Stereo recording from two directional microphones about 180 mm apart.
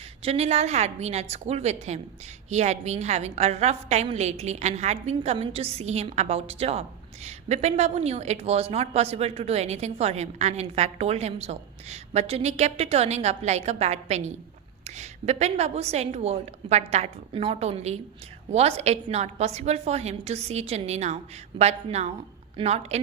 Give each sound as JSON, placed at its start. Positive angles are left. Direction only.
{"t": 0.2, "sound": "a woman's voice", "side_deg": -35}